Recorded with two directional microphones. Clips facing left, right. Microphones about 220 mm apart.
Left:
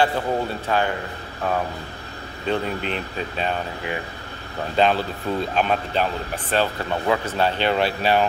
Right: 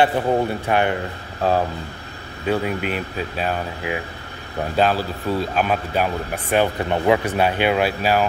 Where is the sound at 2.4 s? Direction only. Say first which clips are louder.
Right 3 dB; 10° right (ahead or behind).